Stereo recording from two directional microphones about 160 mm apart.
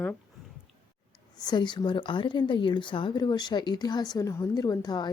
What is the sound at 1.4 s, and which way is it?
Speech, 25° left (ahead or behind).